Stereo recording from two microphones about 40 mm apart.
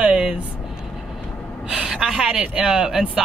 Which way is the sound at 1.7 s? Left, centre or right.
Centre.